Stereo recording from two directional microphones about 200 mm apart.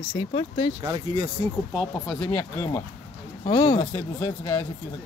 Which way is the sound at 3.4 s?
25° left (ahead or behind).